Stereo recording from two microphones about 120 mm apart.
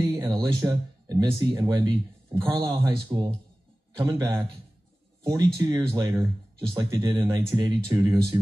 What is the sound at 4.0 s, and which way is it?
Speech, 30° right (ahead or behind).